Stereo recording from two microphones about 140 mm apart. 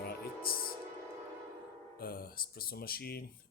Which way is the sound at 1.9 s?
90° left.